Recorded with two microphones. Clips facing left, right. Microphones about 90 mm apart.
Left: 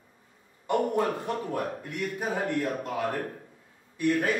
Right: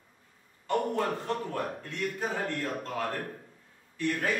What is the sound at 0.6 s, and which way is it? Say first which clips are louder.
A man's voice: left 3 dB; 15° left (ahead or behind).